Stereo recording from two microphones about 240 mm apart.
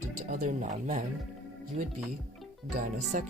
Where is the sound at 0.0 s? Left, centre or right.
Right.